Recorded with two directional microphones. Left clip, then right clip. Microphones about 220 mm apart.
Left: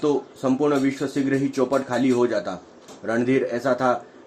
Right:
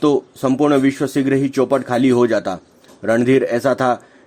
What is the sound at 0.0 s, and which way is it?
Speech, 45° right (ahead or behind).